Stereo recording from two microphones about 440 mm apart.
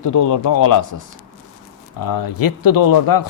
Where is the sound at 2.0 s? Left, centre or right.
Left.